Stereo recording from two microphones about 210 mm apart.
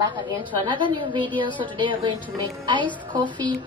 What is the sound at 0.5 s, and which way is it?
Speech, 25° right (ahead or behind).